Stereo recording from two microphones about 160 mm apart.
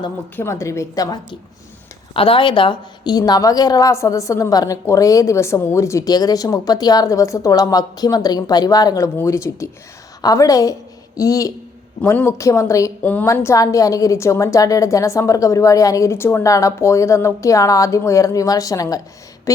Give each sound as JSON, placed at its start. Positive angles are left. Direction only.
{"t": 0.3, "sound": "a woman's voice", "side_deg": 15}
{"t": 2.1, "sound": "a woman's voice", "side_deg": 35}
{"t": 19.5, "sound": "a sound", "side_deg": 20}